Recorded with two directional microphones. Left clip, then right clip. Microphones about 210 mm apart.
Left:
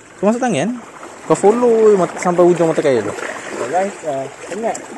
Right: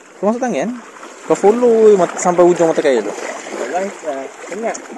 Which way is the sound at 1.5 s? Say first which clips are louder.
Right 2 dB; 15° right (ahead or behind).